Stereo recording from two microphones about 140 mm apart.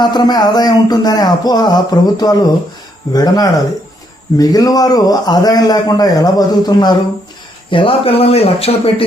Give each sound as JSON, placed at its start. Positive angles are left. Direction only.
{"t": 0.0, "sound": "a man's voice", "side_deg": 30}